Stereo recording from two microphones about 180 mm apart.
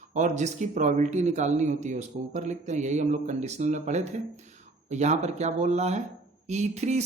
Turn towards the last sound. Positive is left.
turn(degrees=-40)  # may be behind; listen again after turning